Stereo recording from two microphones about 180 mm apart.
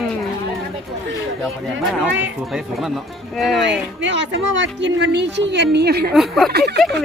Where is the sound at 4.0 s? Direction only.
90° right; by 6.1 s 60° right (ahead or behind).